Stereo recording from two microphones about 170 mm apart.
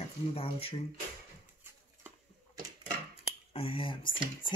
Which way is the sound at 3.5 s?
35° left (ahead or behind).